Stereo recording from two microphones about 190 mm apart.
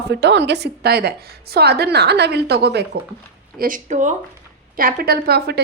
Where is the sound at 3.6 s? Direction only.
45° right (ahead or behind).